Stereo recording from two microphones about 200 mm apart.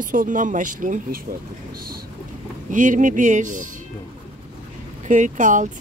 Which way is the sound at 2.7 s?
40° right (ahead or behind).